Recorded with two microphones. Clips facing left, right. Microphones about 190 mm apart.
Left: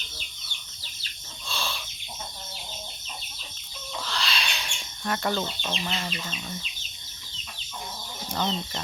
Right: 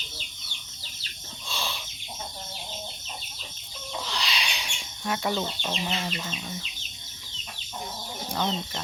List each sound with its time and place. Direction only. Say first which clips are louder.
1.5 s chicken: left 1 dB; 15° right (ahead or behind)
4.0 s bird: left 2 dB; 15° right (ahead or behind)
8.3 s speech: even; 5° right (ahead or behind)